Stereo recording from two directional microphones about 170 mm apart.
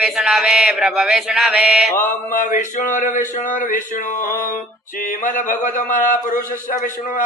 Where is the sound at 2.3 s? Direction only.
50° left (ahead or behind).